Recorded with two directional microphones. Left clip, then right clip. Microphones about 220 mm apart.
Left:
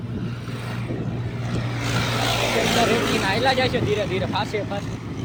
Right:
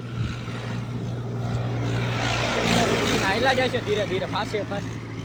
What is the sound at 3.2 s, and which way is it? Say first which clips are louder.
Speech: left 1 dB; 5° left (ahead or behind).